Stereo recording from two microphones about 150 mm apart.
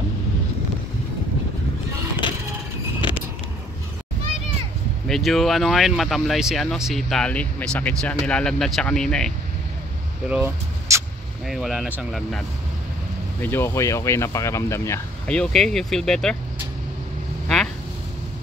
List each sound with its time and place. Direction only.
3.0 s vehicle: 30° left (ahead or behind)
5.0 s speech: centre (ahead or behind)
10.2 s speech: 10° right (ahead or behind)
10.9 s vehicle: 20° right (ahead or behind)
11.4 s speech: centre (ahead or behind)
13.4 s speech: 15° left (ahead or behind)
15.2 s speech: 5° left (ahead or behind)